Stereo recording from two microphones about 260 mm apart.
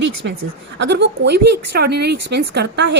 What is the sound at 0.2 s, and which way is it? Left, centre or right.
Speech, right.